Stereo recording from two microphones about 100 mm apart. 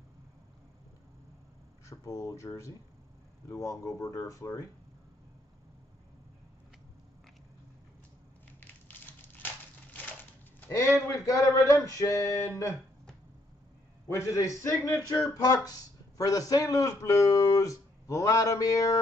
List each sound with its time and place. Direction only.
1.9 s speech: 30° left (ahead or behind)
8.5 s a sound: 20° left (ahead or behind)
11.1 s speech: 30° left (ahead or behind)
14.0 s speech: 30° left (ahead or behind)